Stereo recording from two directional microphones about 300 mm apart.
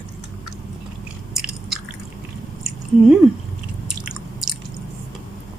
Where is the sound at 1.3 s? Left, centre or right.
Centre.